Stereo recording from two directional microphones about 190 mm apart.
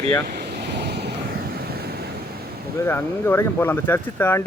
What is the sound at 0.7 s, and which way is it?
Waves, 60° right (ahead or behind).